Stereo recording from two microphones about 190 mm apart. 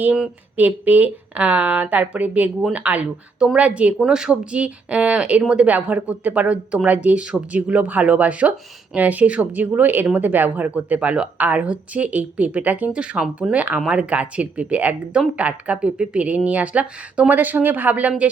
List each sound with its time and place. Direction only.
0.0 s speech: 5° right (ahead or behind)